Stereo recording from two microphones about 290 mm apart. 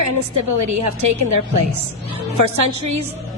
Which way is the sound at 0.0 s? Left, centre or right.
Right.